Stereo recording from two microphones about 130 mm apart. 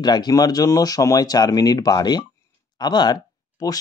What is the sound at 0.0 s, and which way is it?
Speech, 30° left (ahead or behind).